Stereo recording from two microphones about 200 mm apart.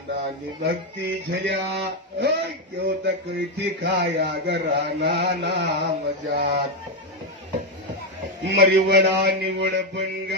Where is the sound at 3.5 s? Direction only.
60° right (ahead or behind).